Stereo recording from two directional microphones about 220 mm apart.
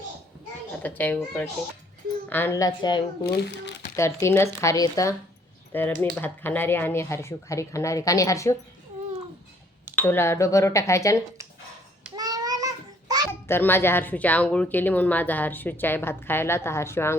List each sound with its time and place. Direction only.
0.8 s speech: 5° left (ahead or behind)
9.9 s speech: 10° left (ahead or behind)
12.1 s child singing: 15° right (ahead or behind)
13.5 s speech: 10° left (ahead or behind)